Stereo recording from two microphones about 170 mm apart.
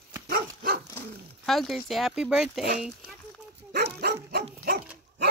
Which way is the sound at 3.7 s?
70° right (ahead or behind).